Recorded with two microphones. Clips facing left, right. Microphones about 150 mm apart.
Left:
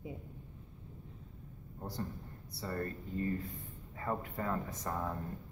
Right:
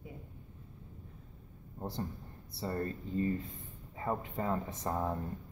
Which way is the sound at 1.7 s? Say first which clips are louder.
Right 2 dB; 25° right (ahead or behind).